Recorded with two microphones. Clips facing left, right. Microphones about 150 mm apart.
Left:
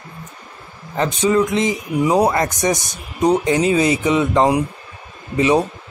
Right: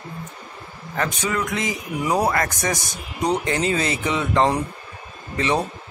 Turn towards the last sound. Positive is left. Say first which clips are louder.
# left 7 dB
turn(degrees=15)  # may be behind; listen again after turning